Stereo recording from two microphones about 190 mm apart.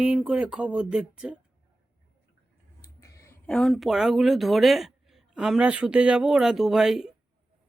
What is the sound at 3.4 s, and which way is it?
Speech, 5° left (ahead or behind).